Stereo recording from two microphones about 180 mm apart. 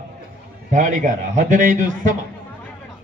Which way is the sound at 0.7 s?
45° right (ahead or behind).